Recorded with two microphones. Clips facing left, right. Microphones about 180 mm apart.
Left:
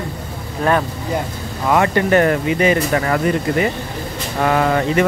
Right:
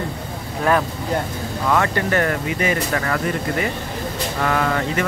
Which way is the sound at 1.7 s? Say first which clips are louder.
Left 5 dB; 20° left (ahead or behind).